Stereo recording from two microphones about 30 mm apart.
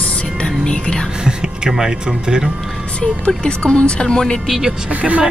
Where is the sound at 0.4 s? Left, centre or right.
Left.